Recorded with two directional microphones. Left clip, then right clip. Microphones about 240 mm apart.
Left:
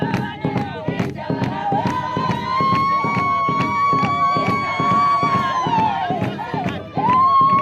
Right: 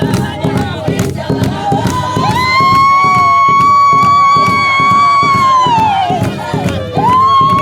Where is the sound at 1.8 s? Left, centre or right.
Right.